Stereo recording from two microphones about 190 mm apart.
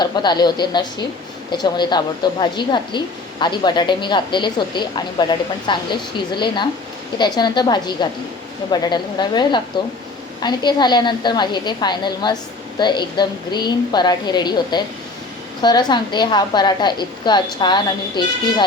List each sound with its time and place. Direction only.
0.0 s a woman's voice: 20° left (ahead or behind)